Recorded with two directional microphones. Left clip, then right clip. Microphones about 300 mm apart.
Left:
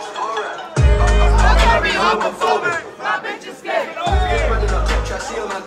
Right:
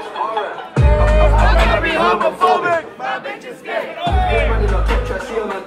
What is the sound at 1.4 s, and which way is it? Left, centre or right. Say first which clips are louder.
Music: left 1 dB; left.